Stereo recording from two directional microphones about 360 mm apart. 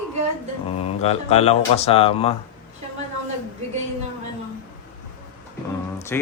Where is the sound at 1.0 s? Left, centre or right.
Centre.